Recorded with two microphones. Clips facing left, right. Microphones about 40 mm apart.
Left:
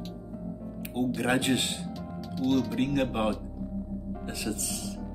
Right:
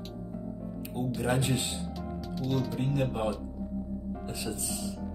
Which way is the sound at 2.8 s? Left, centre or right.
Left.